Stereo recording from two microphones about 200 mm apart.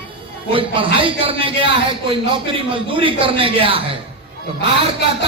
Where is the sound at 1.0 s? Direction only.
25° right (ahead or behind).